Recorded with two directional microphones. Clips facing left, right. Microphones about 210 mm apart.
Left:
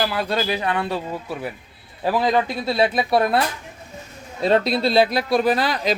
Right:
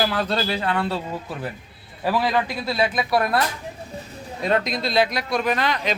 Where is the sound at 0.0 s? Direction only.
10° left (ahead or behind); by 3.4 s 25° left (ahead or behind).